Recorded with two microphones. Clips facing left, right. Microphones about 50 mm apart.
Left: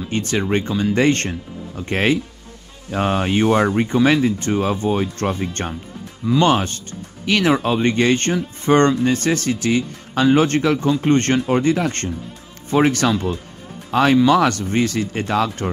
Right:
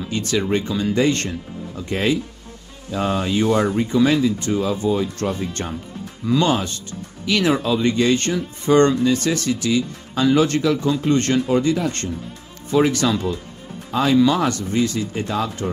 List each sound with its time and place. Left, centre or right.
0.1 s speech: left
13.8 s speech: left